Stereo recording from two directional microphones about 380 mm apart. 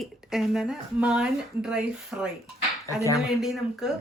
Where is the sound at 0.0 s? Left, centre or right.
Centre.